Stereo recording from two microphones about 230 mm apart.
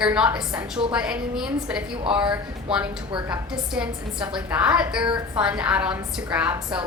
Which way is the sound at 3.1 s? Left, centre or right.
Centre.